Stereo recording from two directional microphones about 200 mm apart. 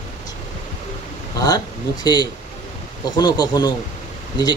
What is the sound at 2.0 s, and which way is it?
Speech, 20° left (ahead or behind).